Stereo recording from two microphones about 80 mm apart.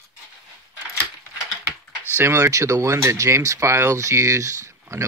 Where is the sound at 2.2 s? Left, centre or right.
Right.